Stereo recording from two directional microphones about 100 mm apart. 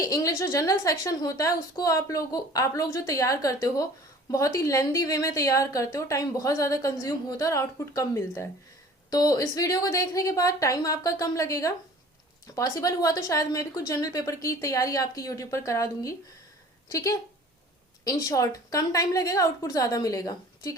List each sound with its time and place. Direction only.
0.0 s a woman's voice: 35° left (ahead or behind)